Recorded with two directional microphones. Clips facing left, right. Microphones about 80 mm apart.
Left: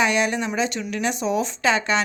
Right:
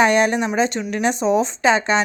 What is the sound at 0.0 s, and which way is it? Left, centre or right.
Speech, right.